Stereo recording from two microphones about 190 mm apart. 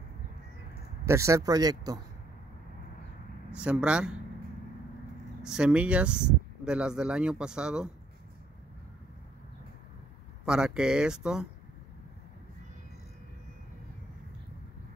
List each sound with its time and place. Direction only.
1.0 s speech: 15° right (ahead or behind)
3.5 s speech: 5° right (ahead or behind)
5.4 s speech: 5° right (ahead or behind)
10.4 s speech: 5° right (ahead or behind)